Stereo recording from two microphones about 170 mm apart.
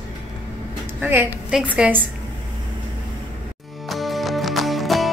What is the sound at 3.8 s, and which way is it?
Music, centre (ahead or behind).